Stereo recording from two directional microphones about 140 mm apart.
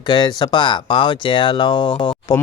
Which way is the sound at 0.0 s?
30° left (ahead or behind).